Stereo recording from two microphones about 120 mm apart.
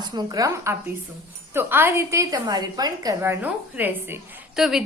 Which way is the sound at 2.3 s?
35° right (ahead or behind).